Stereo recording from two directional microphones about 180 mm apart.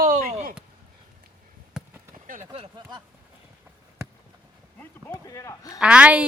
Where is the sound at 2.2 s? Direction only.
50° right (ahead or behind).